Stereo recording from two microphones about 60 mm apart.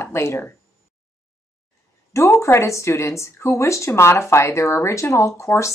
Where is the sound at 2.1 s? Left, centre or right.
Left.